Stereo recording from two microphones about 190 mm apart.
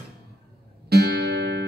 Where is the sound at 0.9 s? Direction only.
55° right (ahead or behind).